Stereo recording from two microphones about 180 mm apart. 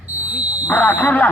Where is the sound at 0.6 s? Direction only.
10° left (ahead or behind).